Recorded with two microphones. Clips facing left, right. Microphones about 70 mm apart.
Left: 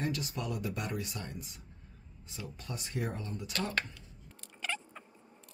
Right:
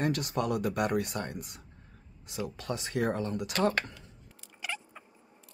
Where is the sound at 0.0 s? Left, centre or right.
Right.